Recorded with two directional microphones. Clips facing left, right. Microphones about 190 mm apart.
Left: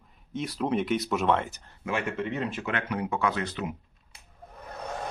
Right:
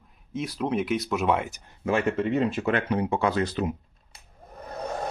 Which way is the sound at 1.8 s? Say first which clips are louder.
Right 6 dB; 30° right (ahead or behind).